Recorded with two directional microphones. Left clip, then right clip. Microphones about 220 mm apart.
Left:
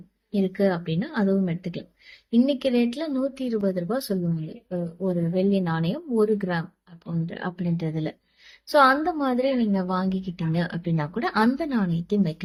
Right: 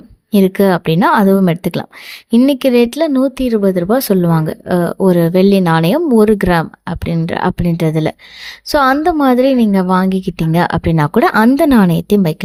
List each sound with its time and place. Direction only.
0.3 s a woman's voice: 50° right (ahead or behind)